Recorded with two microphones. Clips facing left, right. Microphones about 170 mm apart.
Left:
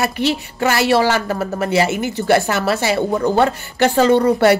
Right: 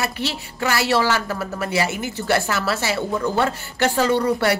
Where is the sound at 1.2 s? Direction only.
50° left (ahead or behind).